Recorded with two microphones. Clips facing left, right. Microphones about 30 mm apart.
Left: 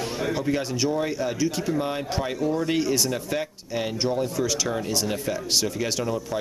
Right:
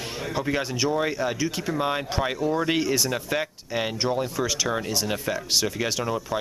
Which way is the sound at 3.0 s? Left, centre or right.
Centre.